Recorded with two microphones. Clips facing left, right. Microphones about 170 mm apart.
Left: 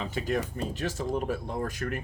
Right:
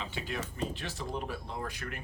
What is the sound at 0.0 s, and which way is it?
Speech, 40° left (ahead or behind).